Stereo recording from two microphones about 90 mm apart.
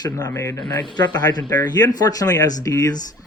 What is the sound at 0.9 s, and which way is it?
Speech, 50° left (ahead or behind).